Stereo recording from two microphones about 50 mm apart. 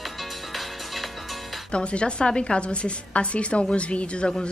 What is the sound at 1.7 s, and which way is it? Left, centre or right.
A woman's voice, left.